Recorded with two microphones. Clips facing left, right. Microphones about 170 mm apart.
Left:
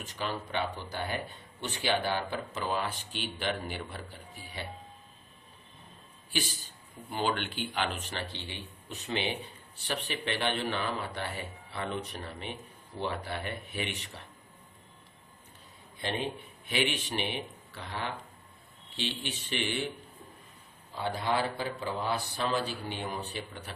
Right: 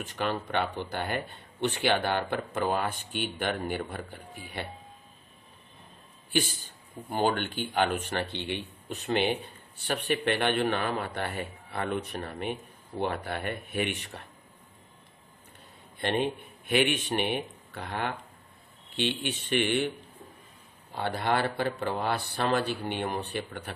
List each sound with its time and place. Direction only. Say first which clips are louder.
0.0 s speech: right 5 dB; 60° right (ahead or behind)
7.1 s speech: right 4 dB; 45° right (ahead or behind)
16.0 s a man's voice: right 6 dB; 60° right (ahead or behind)
21.2 s speech: right 4 dB; 60° right (ahead or behind)